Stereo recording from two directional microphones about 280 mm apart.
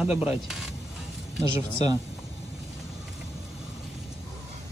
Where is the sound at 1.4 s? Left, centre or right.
Centre.